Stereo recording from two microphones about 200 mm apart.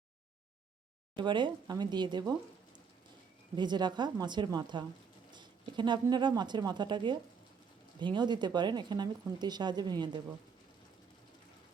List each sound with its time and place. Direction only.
1.1 s speech: 25° right (ahead or behind)
3.5 s a woman's voice: 20° right (ahead or behind)